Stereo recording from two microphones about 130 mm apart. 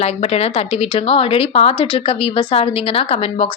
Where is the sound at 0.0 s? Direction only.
50° left (ahead or behind).